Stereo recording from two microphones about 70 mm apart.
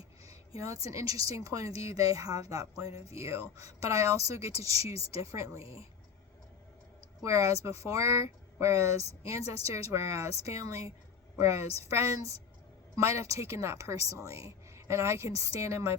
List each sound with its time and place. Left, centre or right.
0.3 s a woman's voice: right
7.2 s a woman's voice: right